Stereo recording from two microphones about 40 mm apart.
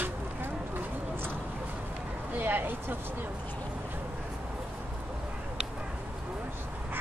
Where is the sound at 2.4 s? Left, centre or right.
Right.